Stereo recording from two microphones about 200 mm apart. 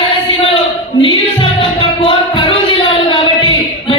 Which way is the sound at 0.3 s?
30° left (ahead or behind).